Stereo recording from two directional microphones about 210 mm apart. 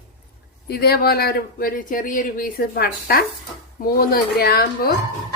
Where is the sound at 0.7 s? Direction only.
50° left (ahead or behind).